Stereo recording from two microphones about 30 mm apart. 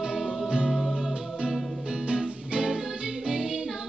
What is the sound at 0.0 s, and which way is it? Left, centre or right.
Music, centre.